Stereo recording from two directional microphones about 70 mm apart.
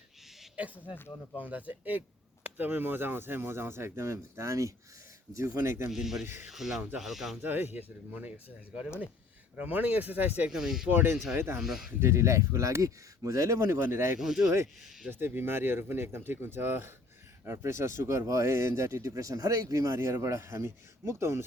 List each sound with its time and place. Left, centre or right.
0.9 s speech: left
1.4 s speech: right
5.9 s speech: centre
6.2 s speech: right
6.5 s speech: centre
7.4 s speech: right
9.6 s speech: right
10.5 s speech: centre
10.8 s speech: right
11.6 s speech: centre
11.9 s speech: right
14.2 s speech: centre
15.1 s speech: right